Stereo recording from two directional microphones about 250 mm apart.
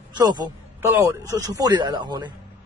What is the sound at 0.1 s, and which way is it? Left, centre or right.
A man's voice, centre.